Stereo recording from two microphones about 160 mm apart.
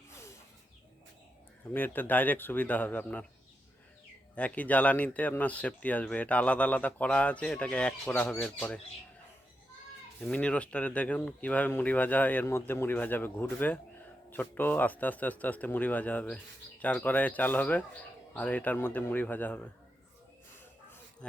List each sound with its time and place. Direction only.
0.1 s snake: 15° left (ahead or behind)
1.7 s speech: 10° left (ahead or behind)
4.4 s speech: 10° left (ahead or behind)
10.2 s speech: 5° left (ahead or behind)